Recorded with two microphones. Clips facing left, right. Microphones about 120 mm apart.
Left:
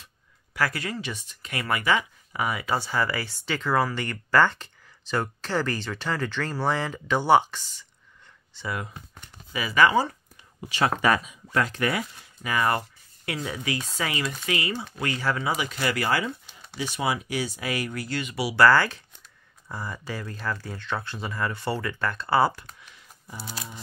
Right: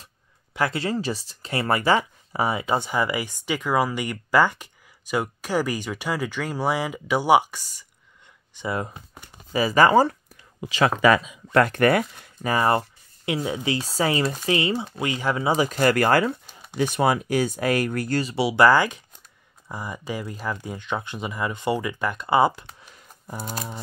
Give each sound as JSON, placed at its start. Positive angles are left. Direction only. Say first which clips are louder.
{"t": 0.6, "sound": "speech", "louder": "right 4 dB", "side_deg": -25}
{"t": 8.5, "sound": "speech", "louder": "right 5 dB", "side_deg": -25}
{"t": 9.5, "sound": "speech", "louder": "right 4 dB", "side_deg": -35}
{"t": 11.1, "sound": "speech", "louder": "right 6 dB", "side_deg": -75}
{"t": 12.4, "sound": "speech", "louder": "right 4 dB", "side_deg": -30}
{"t": 15.5, "sound": "speech", "louder": "right 7 dB", "side_deg": -40}
{"t": 18.2, "sound": "speech", "louder": "right 1 dB", "side_deg": -25}
{"t": 22.8, "sound": "scissors", "louder": "right 2 dB", "side_deg": -45}